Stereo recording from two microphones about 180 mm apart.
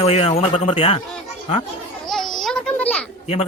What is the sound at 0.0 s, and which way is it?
A man's voice, 35° left (ahead or behind).